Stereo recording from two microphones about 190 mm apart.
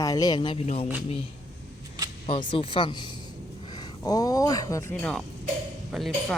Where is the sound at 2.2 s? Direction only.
25° left (ahead or behind).